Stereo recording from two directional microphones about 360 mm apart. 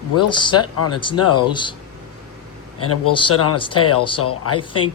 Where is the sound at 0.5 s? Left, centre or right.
Left.